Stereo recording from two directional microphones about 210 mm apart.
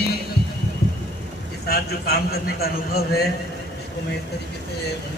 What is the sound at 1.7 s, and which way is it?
A man's voice, 50° left (ahead or behind).